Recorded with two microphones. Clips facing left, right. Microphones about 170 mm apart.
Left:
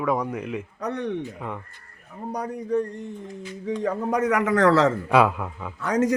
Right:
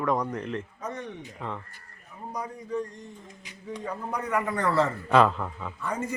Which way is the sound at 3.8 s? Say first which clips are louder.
Left 9 dB; 90° left.